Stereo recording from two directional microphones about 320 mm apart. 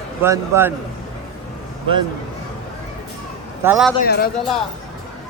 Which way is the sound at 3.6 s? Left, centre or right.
Centre.